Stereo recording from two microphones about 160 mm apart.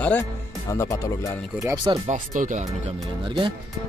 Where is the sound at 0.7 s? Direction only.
20° left (ahead or behind).